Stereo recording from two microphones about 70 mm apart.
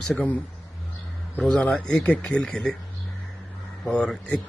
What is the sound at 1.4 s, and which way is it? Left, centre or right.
A man's voice, centre.